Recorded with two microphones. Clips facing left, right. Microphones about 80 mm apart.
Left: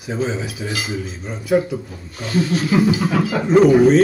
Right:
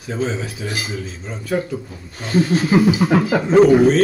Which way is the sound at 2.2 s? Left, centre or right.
Right.